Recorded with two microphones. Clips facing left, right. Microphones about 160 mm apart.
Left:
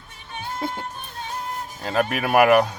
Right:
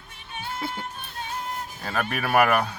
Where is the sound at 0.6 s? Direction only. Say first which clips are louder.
Left 4 dB; 40° left (ahead or behind).